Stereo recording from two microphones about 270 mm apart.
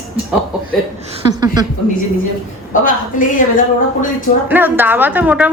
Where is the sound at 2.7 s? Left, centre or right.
Left.